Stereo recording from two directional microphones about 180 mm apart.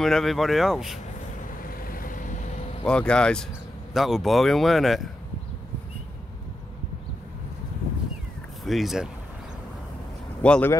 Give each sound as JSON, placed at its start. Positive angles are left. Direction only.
{"t": 0.0, "sound": "speech", "side_deg": 0}
{"t": 1.6, "sound": "vehicle", "side_deg": 50}
{"t": 2.8, "sound": "speech", "side_deg": 5}
{"t": 8.6, "sound": "speech", "side_deg": 0}
{"t": 10.4, "sound": "speech", "side_deg": 10}